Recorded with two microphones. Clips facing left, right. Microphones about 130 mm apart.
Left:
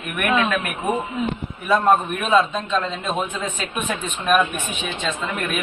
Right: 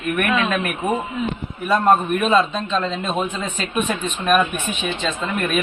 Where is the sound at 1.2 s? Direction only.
Centre (ahead or behind).